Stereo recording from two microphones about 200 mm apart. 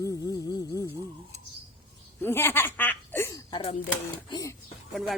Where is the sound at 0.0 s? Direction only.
15° left (ahead or behind).